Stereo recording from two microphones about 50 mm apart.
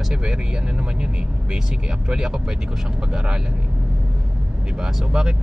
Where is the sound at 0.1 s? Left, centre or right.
Centre.